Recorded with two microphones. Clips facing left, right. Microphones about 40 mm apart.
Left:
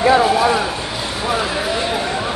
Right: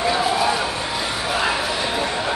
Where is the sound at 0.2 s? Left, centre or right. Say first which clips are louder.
Left 5 dB; centre.